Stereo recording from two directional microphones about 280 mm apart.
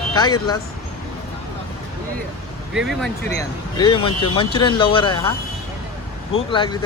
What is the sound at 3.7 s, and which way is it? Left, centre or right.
Speech, centre.